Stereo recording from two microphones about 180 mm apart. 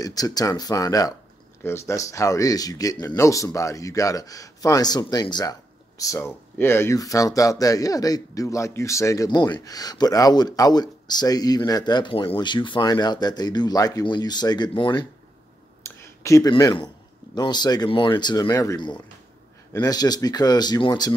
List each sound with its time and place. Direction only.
0.0 s speech: 20° left (ahead or behind)
15.8 s a sound: 15° left (ahead or behind)
17.4 s speech: 25° left (ahead or behind)